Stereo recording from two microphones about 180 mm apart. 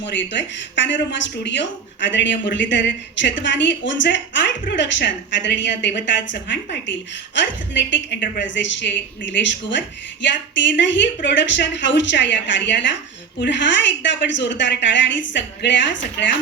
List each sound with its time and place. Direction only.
0.0 s speech: 75° left (ahead or behind)